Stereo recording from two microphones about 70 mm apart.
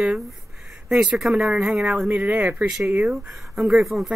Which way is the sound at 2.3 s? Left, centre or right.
Right.